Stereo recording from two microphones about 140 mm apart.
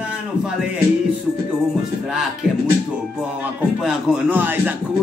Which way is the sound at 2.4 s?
5° right (ahead or behind).